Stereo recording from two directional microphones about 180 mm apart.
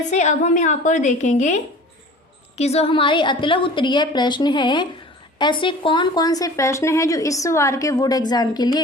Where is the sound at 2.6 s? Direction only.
35° left (ahead or behind).